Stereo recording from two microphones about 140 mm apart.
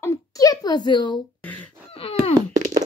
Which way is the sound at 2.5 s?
60° right (ahead or behind).